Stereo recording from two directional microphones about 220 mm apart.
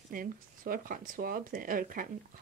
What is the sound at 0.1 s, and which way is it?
Speech, 40° right (ahead or behind).